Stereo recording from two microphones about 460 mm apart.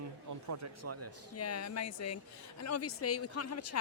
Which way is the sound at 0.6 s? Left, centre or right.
Right.